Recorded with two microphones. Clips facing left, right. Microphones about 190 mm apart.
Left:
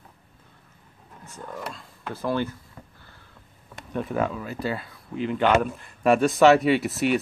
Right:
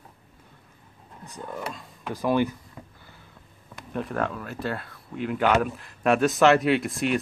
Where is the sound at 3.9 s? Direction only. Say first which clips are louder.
Left 2 dB; centre (ahead or behind).